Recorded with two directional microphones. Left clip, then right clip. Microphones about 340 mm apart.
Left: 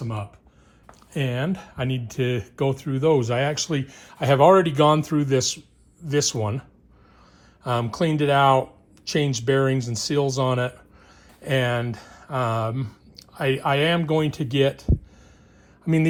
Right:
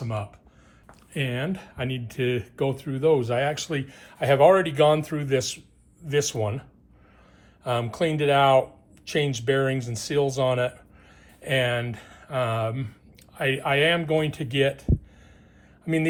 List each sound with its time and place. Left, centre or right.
0.0 s speech: centre
0.9 s speech: centre
15.9 s speech: centre